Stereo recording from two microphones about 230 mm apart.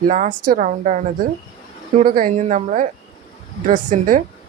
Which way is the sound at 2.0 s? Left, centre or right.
Right.